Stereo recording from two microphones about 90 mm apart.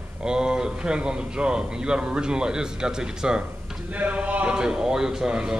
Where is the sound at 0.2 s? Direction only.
10° right (ahead or behind).